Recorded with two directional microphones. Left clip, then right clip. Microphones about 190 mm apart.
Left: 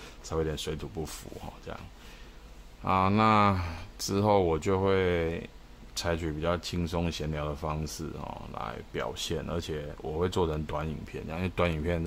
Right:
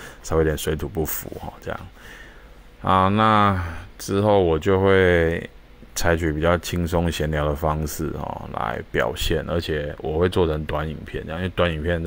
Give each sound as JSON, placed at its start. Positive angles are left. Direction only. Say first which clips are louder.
{"t": 0.0, "sound": "speech", "louder": "right 11 dB", "side_deg": -25}
{"t": 2.8, "sound": "speech", "louder": "right 8 dB", "side_deg": -20}